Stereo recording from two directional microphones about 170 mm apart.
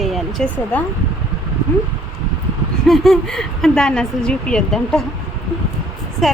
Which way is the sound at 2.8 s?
Centre (ahead or behind).